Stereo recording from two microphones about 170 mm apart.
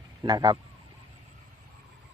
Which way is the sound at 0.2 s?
25° right (ahead or behind).